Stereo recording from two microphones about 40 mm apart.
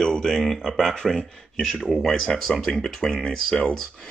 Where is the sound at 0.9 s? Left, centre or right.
Left.